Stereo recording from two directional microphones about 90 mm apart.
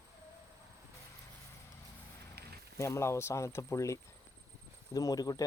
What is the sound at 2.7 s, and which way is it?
Speech, 30° left (ahead or behind).